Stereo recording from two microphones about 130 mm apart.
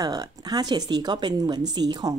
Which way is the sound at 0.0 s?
30° right (ahead or behind).